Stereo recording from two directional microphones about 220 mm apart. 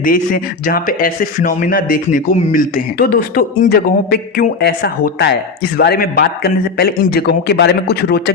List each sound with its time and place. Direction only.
0.0 s a man's voice: 40° left (ahead or behind)